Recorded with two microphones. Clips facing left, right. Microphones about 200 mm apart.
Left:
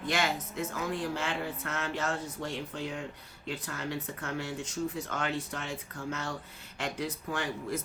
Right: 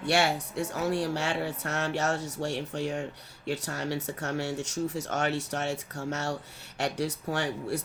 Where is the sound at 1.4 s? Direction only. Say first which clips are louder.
Right 4 dB; 75° right (ahead or behind).